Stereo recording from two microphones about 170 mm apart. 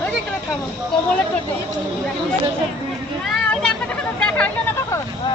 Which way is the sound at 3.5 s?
5° left (ahead or behind).